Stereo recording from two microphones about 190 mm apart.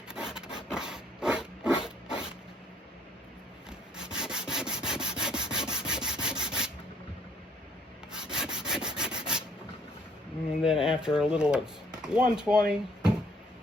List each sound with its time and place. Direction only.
0.1 s wood: 5° right (ahead or behind)
0.7 s a sound: 5° right (ahead or behind)
3.7 s rub: 5° right (ahead or behind)
8.1 s rub: 5° right (ahead or behind)
10.8 s a sound: 25° left (ahead or behind)
11.0 s speech: 5° right (ahead or behind)